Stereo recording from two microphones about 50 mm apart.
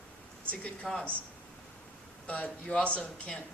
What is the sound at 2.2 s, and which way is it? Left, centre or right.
Speech, left.